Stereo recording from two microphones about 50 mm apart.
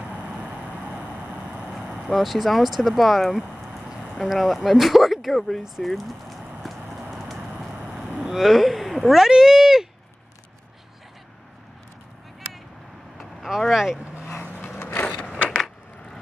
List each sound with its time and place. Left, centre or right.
0.1 s vehicle: right
2.0 s speech: centre
5.6 s horse: centre
8.2 s speech: centre
13.2 s vehicle: centre
13.7 s speech: centre
14.0 s vehicle: right
15.0 s a sound: centre
15.5 s a sound: centre